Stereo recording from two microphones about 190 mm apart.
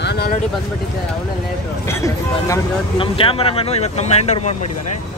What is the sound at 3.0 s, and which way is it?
Speech, 30° left (ahead or behind).